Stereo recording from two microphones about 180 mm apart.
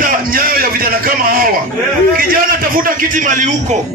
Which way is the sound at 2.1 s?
50° right (ahead or behind).